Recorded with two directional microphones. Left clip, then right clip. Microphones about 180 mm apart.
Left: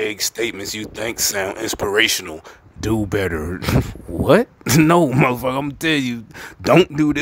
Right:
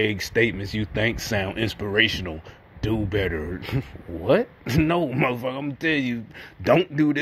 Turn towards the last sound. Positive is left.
turn(degrees=15)  # may be behind; listen again after turning